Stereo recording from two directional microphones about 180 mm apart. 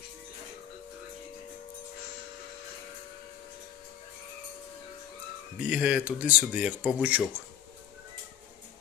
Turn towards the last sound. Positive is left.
turn(degrees=-10)  # may be behind; listen again after turning